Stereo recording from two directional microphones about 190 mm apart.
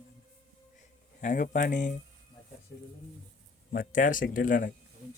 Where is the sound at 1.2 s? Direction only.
40° left (ahead or behind).